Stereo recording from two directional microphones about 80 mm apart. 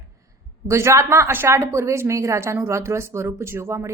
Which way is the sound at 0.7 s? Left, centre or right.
Right.